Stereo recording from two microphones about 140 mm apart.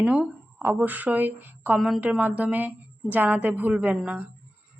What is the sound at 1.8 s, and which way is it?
A woman's voice, centre (ahead or behind).